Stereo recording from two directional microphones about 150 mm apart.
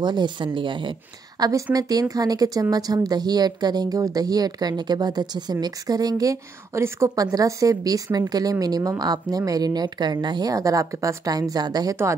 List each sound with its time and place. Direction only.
0.0 s speech: 30° right (ahead or behind)